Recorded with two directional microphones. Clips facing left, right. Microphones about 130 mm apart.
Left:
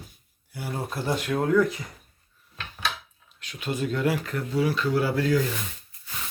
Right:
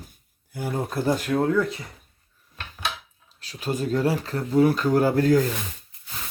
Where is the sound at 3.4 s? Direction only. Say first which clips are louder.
Right 2 dB; 35° right (ahead or behind).